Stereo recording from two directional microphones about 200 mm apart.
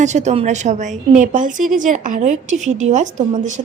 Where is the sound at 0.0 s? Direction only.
35° right (ahead or behind).